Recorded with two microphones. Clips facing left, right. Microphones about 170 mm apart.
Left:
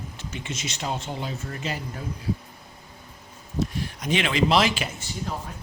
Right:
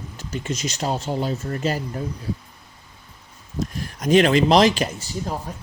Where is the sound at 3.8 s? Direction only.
45° right (ahead or behind).